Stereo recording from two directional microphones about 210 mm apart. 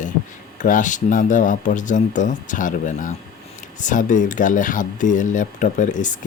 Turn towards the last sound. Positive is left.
turn(degrees=35)  # may be behind; listen again after turning